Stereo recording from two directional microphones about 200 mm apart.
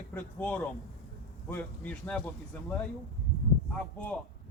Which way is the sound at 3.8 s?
5° left (ahead or behind).